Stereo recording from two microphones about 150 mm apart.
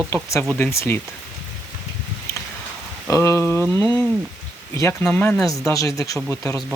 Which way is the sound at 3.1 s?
20° left (ahead or behind).